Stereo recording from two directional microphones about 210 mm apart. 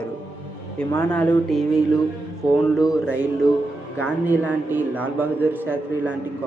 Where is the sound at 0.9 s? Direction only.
15° left (ahead or behind).